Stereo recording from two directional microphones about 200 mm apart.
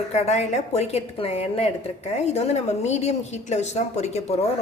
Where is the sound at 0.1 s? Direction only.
30° left (ahead or behind).